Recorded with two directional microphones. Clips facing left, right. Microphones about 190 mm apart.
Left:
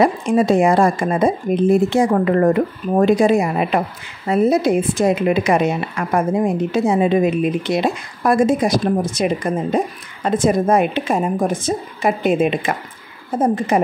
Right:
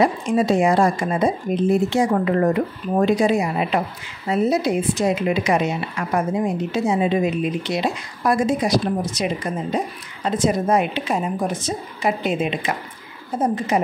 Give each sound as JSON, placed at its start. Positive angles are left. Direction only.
{"t": 0.0, "sound": "a woman's voice", "side_deg": 55}